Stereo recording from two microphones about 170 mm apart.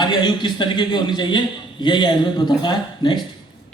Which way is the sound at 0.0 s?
25° left (ahead or behind).